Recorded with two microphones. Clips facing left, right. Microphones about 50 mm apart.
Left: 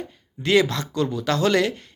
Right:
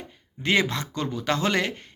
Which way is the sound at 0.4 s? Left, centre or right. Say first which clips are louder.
Left 4 dB; right.